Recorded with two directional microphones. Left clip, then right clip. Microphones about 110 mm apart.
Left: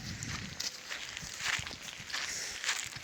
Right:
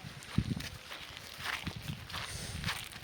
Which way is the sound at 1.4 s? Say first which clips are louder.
Left 4 dB; 25° right (ahead or behind).